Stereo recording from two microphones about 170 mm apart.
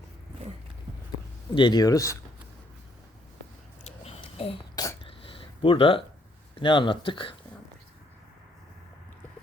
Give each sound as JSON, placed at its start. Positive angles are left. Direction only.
{"t": 1.5, "sound": "speech", "side_deg": 25}
{"t": 3.8, "sound": "a sound", "side_deg": 35}
{"t": 6.6, "sound": "speech", "side_deg": 30}